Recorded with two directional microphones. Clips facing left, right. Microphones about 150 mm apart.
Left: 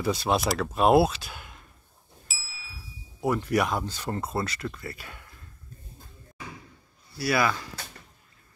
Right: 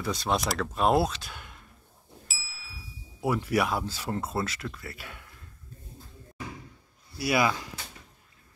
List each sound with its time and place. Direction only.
0.0 s speech: 5° left (ahead or behind)
2.2 s ding: centre (ahead or behind)
7.2 s speech: 20° right (ahead or behind)